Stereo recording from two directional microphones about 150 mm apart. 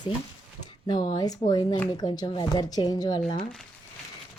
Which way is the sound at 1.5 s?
25° left (ahead or behind).